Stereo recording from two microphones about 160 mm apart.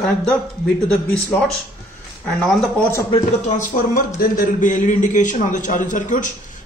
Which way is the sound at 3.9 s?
60° left (ahead or behind).